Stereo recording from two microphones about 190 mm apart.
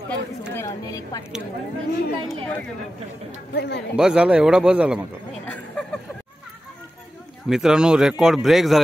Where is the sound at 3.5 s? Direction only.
60° left (ahead or behind).